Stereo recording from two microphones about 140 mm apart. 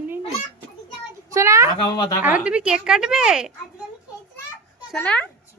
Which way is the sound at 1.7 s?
30° left (ahead or behind).